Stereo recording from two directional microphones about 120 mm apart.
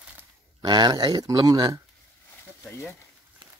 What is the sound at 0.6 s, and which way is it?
Speech, 35° right (ahead or behind).